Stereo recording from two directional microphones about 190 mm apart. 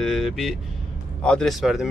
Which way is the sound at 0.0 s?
Centre (ahead or behind).